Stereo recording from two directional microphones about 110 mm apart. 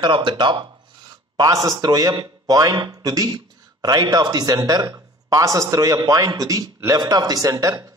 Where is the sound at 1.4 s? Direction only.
35° right (ahead or behind).